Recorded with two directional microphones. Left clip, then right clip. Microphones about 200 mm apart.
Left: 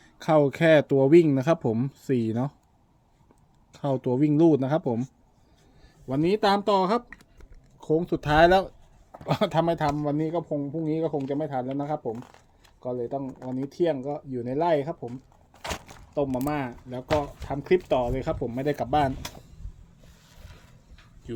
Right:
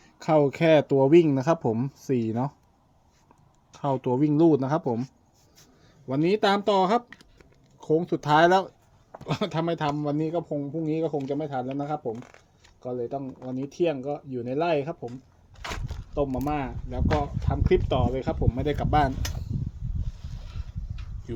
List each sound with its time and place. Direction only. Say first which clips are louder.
0.0 s speech: even; 10° left (ahead or behind)
4.0 s speech: left 1 dB; 15° left (ahead or behind)
6.1 s speech: even; centre (ahead or behind)
15.6 s a sound: left 1 dB; 20° left (ahead or behind)
16.5 s speech: even; 10° left (ahead or behind)
21.3 s speech: even; 5° left (ahead or behind)